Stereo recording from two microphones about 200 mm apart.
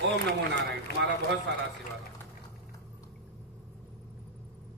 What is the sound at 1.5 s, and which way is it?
Speech, 60° right (ahead or behind).